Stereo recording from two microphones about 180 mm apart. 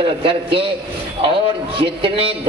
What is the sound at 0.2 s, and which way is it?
Speech, 30° right (ahead or behind).